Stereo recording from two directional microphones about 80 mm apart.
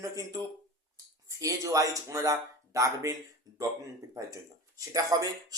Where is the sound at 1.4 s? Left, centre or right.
Right.